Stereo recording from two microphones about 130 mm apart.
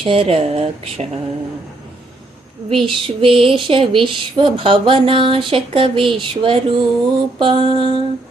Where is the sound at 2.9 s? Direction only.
45° right (ahead or behind).